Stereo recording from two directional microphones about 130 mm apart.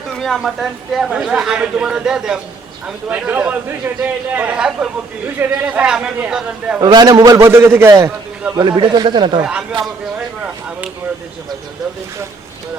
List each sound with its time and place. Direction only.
0.1 s a woman's voice: centre (ahead or behind)
6.7 s a man's voice: 30° right (ahead or behind)
8.5 s speech: 35° right (ahead or behind)
9.4 s a man's voice: 10° right (ahead or behind)